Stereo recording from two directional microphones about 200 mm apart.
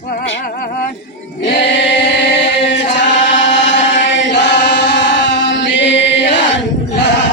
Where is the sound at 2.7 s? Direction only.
65° left (ahead or behind).